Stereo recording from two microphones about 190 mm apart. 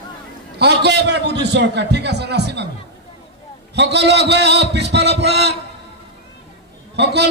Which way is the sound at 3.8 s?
65° right (ahead or behind).